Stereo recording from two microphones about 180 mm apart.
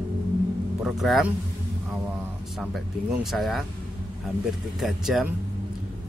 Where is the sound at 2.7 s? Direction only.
Centre (ahead or behind).